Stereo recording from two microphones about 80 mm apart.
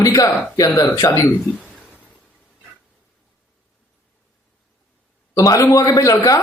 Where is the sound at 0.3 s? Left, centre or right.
Left.